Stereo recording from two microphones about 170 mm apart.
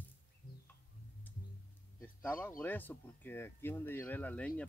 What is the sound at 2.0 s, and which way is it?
Speech, 10° left (ahead or behind).